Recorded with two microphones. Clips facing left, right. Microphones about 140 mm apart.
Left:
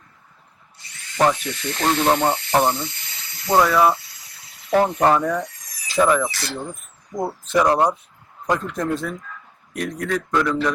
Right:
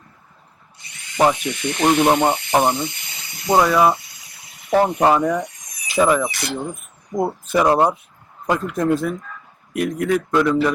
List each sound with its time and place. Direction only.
0.9 s a man's voice: 15° right (ahead or behind)